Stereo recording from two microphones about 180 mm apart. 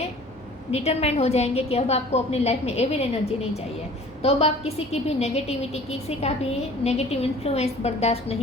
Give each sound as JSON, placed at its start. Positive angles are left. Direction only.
{"t": 0.7, "sound": "a woman's voice", "side_deg": 35}